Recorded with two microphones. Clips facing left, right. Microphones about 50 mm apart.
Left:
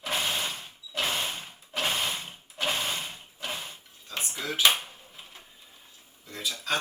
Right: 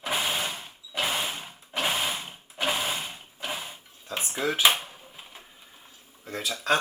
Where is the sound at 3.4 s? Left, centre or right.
Centre.